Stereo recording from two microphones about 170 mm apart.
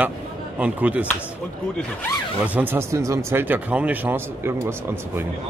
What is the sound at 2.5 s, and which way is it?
Speech, 15° right (ahead or behind).